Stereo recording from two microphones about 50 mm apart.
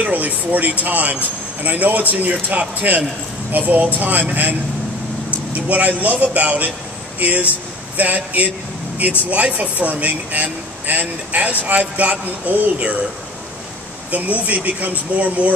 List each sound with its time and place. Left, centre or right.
0.0 s a man's voice: right
14.1 s a man's voice: right